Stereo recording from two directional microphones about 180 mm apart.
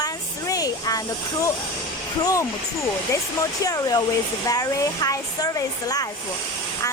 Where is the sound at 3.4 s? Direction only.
20° left (ahead or behind).